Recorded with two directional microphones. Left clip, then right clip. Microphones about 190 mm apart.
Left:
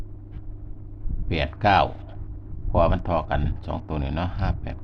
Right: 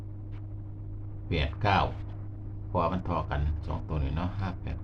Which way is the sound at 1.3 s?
50° left (ahead or behind).